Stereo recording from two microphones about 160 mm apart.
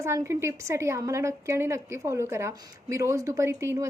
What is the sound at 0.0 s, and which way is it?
A woman's voice, 15° right (ahead or behind).